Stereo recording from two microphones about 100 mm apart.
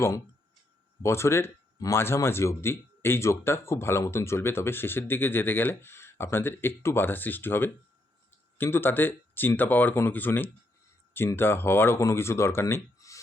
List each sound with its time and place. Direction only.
1.0 s speech: 25° left (ahead or behind)